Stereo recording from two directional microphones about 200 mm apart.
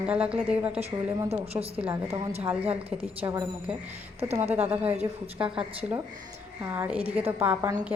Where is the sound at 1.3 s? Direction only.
30° right (ahead or behind).